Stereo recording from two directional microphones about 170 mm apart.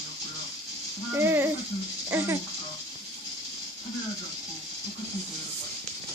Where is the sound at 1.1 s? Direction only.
15° right (ahead or behind).